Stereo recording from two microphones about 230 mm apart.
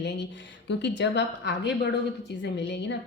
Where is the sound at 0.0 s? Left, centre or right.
Left.